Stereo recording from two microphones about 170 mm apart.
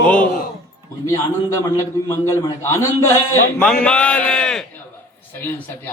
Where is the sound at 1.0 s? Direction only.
20° left (ahead or behind).